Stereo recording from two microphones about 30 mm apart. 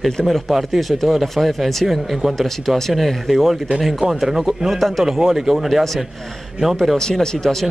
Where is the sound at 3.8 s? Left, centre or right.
Centre.